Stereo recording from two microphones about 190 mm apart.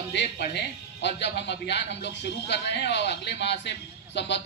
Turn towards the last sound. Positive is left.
turn(degrees=65)  # may be behind; listen again after turning